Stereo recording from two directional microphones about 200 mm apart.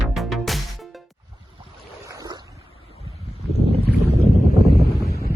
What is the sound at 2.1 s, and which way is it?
Boat, 20° right (ahead or behind).